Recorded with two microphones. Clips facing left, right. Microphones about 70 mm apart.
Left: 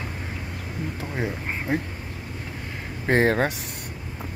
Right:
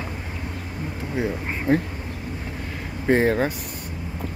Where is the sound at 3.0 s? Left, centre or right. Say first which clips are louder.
Right 1 dB; left.